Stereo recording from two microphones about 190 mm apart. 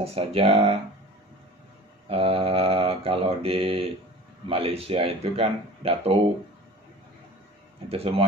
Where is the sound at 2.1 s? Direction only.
30° right (ahead or behind).